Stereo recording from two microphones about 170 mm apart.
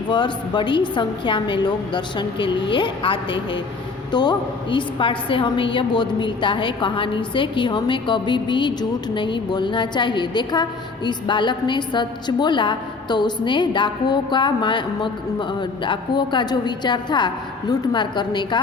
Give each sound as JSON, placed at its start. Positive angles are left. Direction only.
{"t": 0.1, "sound": "a woman's voice", "side_deg": 25}